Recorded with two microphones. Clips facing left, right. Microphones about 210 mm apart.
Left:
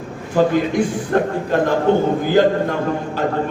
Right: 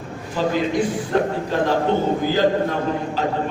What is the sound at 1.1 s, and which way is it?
Speech, 50° left (ahead or behind).